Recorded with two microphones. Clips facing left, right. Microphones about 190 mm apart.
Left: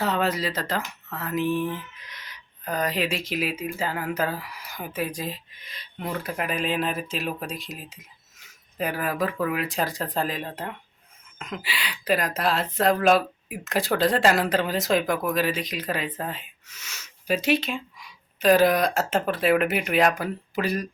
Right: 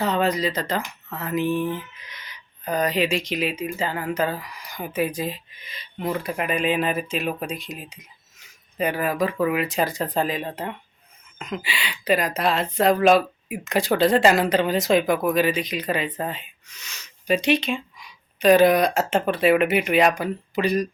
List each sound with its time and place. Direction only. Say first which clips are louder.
0.0 s speech: right 3 dB; 5° left (ahead or behind)